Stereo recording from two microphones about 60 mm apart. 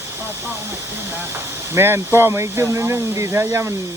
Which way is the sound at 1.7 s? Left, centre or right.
Right.